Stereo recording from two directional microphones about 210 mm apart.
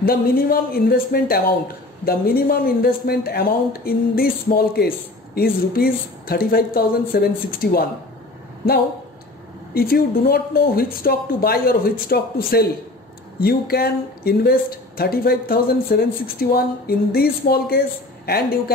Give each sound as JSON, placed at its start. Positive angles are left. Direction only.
{"t": 0.0, "sound": "speech", "side_deg": 45}
{"t": 9.8, "sound": "speech", "side_deg": 45}